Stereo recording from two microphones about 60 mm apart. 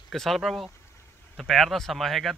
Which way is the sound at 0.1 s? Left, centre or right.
Centre.